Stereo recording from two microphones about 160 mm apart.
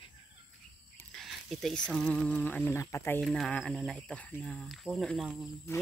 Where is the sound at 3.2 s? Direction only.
5° left (ahead or behind).